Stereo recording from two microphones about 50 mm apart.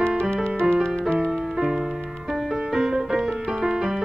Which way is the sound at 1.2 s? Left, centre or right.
Centre.